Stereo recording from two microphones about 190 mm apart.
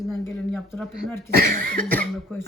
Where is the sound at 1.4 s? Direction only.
50° right (ahead or behind).